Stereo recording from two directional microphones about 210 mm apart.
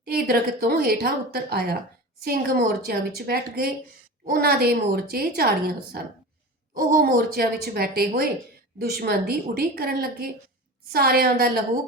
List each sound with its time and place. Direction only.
0.0 s a woman's voice: 45° right (ahead or behind)